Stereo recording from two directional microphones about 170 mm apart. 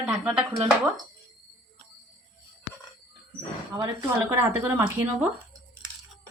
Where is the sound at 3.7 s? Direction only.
15° right (ahead or behind).